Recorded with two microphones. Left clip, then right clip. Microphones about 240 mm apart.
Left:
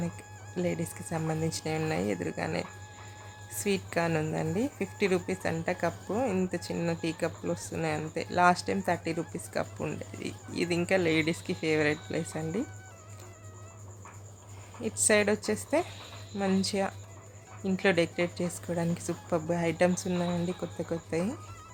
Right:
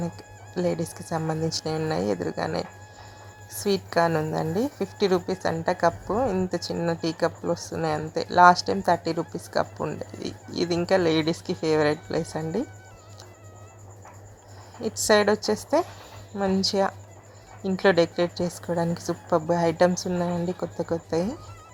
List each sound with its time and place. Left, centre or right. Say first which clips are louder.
0.5 s speech: right 6 dB; centre
0.9 s speech: right 5 dB; centre
1.6 s speech: right 4 dB; centre
14.8 s speech: right 5 dB; centre